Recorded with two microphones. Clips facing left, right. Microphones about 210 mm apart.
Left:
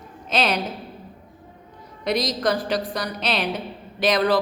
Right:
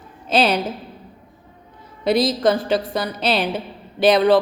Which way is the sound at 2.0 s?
30° right (ahead or behind).